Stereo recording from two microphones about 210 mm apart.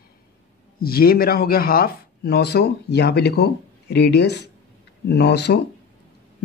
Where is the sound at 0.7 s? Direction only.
45° left (ahead or behind).